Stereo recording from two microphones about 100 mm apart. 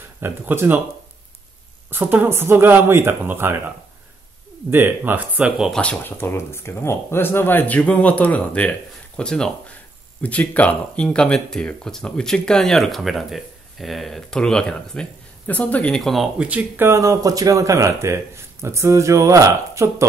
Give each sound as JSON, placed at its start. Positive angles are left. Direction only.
{"t": 0.2, "sound": "speech", "side_deg": -20}
{"t": 1.9, "sound": "speech", "side_deg": -20}
{"t": 5.8, "sound": "speech", "side_deg": 15}
{"t": 16.0, "sound": "speech", "side_deg": 0}
{"t": 16.3, "sound": "speech", "side_deg": -15}